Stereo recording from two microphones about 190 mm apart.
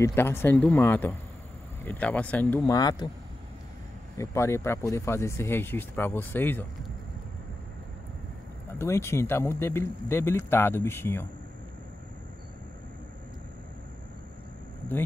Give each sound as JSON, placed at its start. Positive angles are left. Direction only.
{"t": 0.0, "sound": "speech", "side_deg": 10}
{"t": 2.6, "sound": "speech", "side_deg": 20}
{"t": 4.2, "sound": "speech", "side_deg": 15}
{"t": 8.7, "sound": "speech", "side_deg": 15}